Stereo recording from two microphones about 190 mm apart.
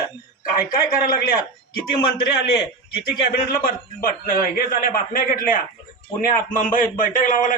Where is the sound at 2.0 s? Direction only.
55° left (ahead or behind).